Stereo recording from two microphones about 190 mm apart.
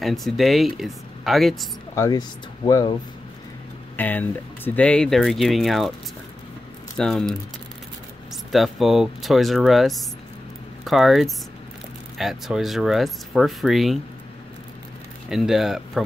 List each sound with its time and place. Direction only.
0.0 s speech: centre (ahead or behind)
2.0 s speech: 20° left (ahead or behind)
3.9 s speech: 10° left (ahead or behind)
7.0 s speech: centre (ahead or behind)
15.2 s speech: centre (ahead or behind)